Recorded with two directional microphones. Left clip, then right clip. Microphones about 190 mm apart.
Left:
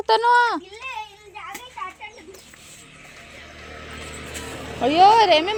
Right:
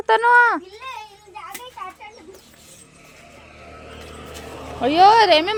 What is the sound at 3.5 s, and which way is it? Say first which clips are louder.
Vehicle: left 1 dB; centre (ahead or behind).